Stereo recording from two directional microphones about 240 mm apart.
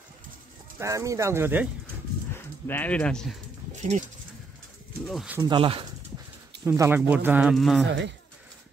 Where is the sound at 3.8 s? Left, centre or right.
Right.